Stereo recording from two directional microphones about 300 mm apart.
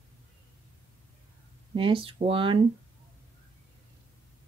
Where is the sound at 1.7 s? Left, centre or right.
Centre.